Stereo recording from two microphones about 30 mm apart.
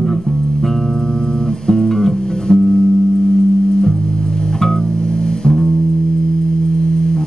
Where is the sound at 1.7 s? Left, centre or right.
Centre.